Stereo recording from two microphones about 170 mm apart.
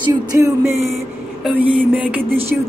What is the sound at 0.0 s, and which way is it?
Music, 15° right (ahead or behind).